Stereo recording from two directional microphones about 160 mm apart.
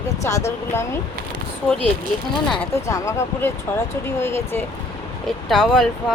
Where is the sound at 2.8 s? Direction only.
20° left (ahead or behind).